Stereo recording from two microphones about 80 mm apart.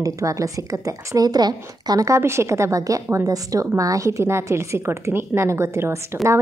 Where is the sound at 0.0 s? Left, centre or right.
Right.